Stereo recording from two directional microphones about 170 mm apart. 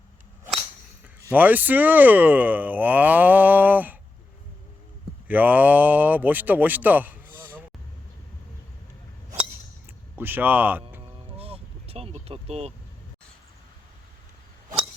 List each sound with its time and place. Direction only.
1.2 s speech: 10° right (ahead or behind)
5.3 s speech: 10° right (ahead or behind)
10.2 s speech: 10° right (ahead or behind)
11.3 s vehicle: 35° right (ahead or behind)